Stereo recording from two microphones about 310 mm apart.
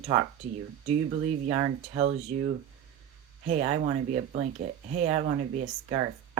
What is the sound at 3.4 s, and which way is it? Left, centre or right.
Speech, right.